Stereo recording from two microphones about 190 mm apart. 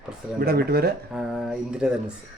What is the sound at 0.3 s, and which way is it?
Speech, 55° right (ahead or behind).